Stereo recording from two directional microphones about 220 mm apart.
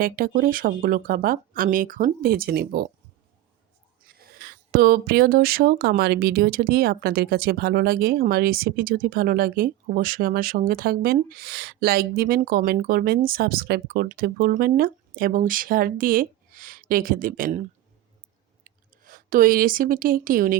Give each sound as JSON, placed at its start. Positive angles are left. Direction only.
{"t": 0.0, "sound": "speech", "side_deg": -40}
{"t": 4.2, "sound": "speech", "side_deg": -45}
{"t": 18.6, "sound": "speech", "side_deg": -40}